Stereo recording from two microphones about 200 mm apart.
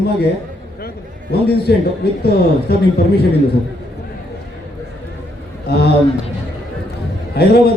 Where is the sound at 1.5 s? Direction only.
55° left (ahead or behind).